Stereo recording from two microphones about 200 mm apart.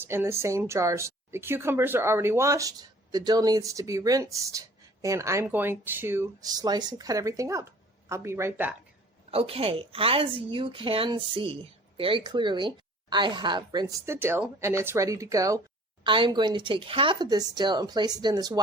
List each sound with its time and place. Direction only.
0.0 s speech: 10° right (ahead or behind)
9.3 s speech: 30° right (ahead or behind)